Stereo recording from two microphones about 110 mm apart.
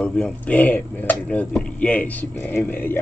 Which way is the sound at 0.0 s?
10° left (ahead or behind).